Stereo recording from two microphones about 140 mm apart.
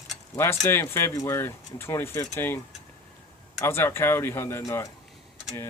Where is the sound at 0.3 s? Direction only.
15° left (ahead or behind).